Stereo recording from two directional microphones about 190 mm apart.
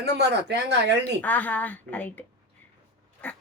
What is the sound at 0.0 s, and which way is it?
Speech, 60° right (ahead or behind).